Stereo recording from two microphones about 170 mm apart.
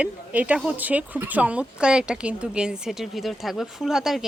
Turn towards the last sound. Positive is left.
turn(degrees=0)  # may be behind; listen again after turning